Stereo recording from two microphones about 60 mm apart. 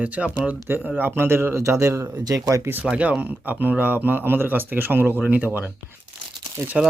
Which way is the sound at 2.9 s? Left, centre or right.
Right.